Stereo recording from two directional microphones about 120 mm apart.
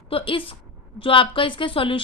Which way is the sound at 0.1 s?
50° left (ahead or behind).